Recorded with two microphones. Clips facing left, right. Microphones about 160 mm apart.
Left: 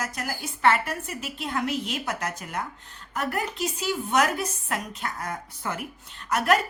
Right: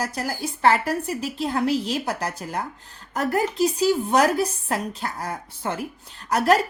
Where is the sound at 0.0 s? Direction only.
35° right (ahead or behind).